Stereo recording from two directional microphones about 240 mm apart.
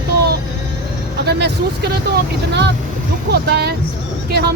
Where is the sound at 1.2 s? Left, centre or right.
Right.